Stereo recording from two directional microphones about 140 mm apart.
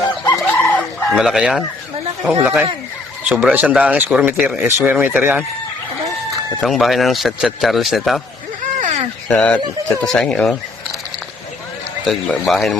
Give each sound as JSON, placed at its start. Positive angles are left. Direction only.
{"t": 0.4, "sound": "chicken", "side_deg": 10}
{"t": 1.1, "sound": "speech", "side_deg": -5}
{"t": 6.6, "sound": "speech", "side_deg": 0}
{"t": 8.8, "sound": "a sound", "side_deg": -55}
{"t": 9.3, "sound": "speech", "side_deg": 10}
{"t": 12.0, "sound": "speech", "side_deg": 0}